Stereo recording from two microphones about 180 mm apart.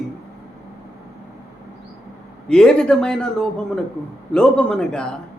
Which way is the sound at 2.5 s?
5° left (ahead or behind).